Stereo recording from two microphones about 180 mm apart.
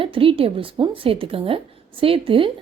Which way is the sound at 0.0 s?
30° right (ahead or behind).